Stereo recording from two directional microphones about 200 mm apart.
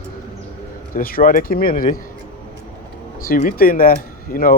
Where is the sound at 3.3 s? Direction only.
45° left (ahead or behind).